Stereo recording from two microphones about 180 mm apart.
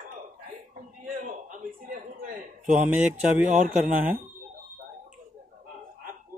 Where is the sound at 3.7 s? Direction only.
5° right (ahead or behind).